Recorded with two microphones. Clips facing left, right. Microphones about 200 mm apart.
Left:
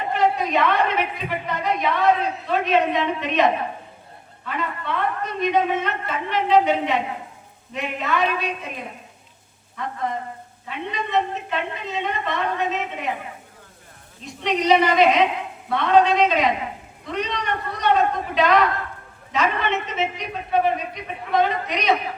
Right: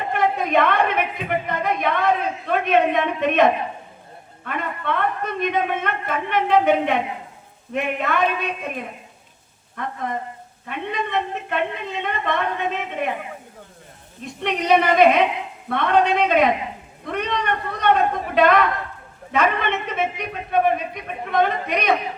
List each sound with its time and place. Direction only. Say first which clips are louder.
0.1 s a sound: even; 55° right (ahead or behind)
4.4 s a man's voice: right 2 dB; 55° right (ahead or behind)
9.8 s a man's voice: even; 55° right (ahead or behind)
14.2 s a man's voice: left 1 dB; 55° right (ahead or behind)